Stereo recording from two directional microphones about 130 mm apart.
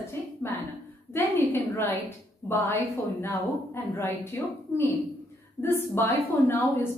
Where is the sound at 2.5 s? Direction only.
15° left (ahead or behind).